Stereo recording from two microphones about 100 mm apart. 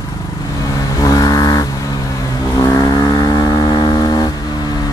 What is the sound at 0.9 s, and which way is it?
Vehicle, 40° left (ahead or behind).